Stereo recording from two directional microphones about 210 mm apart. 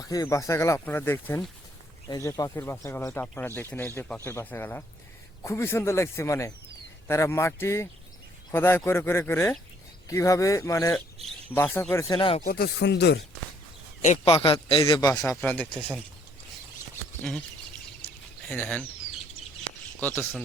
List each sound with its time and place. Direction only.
0.1 s speech: 15° left (ahead or behind)
12.5 s speech: 50° left (ahead or behind)
14.0 s speech: 30° left (ahead or behind)
15.3 s speech: 10° left (ahead or behind)
18.4 s speech: 5° left (ahead or behind)
20.0 s speech: 10° left (ahead or behind)